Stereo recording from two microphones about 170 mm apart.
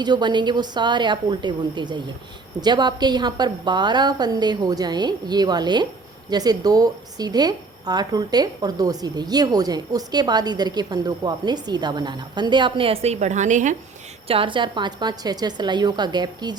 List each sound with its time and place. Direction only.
0.0 s a woman's voice: 25° right (ahead or behind); by 13.7 s 45° right (ahead or behind)
14.3 s a woman's voice: 30° right (ahead or behind)